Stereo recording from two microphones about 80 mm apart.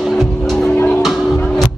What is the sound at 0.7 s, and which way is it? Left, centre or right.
Music, left.